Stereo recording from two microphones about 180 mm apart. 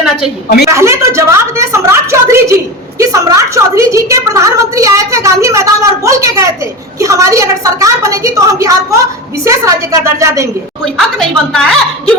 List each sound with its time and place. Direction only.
0.4 s a woman's voice: 60° left (ahead or behind)
0.7 s a woman's voice: 15° right (ahead or behind)
11.5 s a woman's voice: 5° left (ahead or behind)